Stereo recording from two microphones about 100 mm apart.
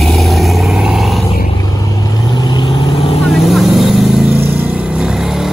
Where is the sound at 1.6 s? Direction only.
40° left (ahead or behind); by 3.2 s 65° left (ahead or behind).